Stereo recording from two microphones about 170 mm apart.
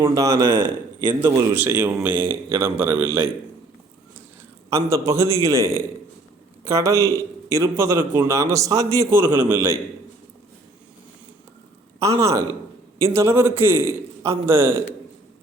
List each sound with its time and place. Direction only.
0.0 s a man's voice: 20° right (ahead or behind)
4.7 s a man's voice: 15° right (ahead or behind)
11.9 s a man's voice: 20° right (ahead or behind)